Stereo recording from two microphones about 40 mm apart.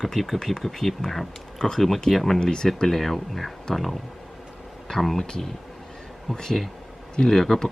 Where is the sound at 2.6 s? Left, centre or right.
Centre.